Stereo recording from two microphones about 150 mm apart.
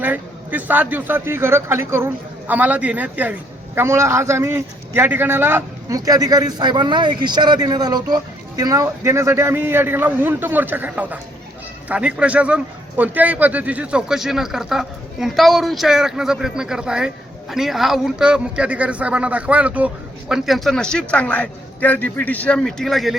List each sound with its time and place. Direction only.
0.0 s a man's voice: 10° right (ahead or behind)